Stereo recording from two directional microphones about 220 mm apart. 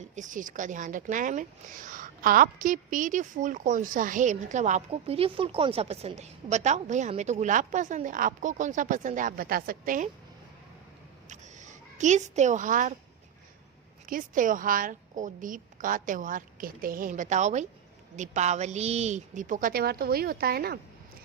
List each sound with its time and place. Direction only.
0.0 s a woman's voice: 35° right (ahead or behind)
11.3 s a woman's voice: 35° right (ahead or behind)
14.1 s a woman's voice: 40° right (ahead or behind)